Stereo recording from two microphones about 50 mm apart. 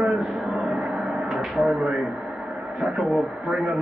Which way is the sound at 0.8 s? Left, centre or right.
Centre.